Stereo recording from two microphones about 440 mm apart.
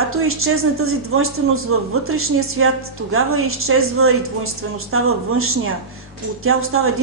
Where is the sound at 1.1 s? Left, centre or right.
Right.